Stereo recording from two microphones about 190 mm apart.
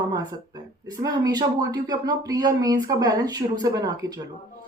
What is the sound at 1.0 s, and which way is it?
Speech, 20° right (ahead or behind).